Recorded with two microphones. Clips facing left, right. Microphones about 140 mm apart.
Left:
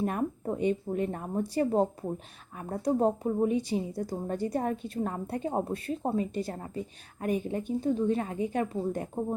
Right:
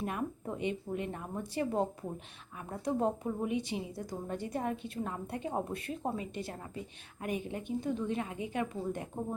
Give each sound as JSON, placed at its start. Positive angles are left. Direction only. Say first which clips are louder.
{"t": 0.0, "sound": "a woman's voice", "louder": "left 6 dB", "side_deg": 40}